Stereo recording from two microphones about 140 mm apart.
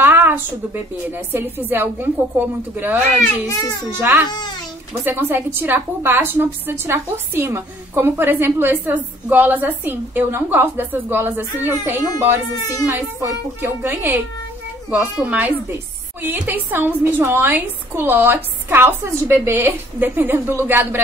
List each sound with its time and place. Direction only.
0.0 s a sound: 15° right (ahead or behind)
1.1 s a woman's voice: 15° right (ahead or behind)
12.8 s a woman's voice: 15° right (ahead or behind)